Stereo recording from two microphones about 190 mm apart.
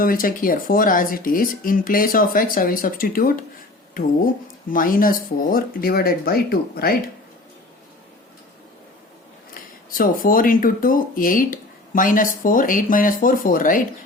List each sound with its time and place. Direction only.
0.0 s speech: 50° left (ahead or behind)
4.7 s speech: 45° left (ahead or behind)
9.6 s speech: 45° left (ahead or behind)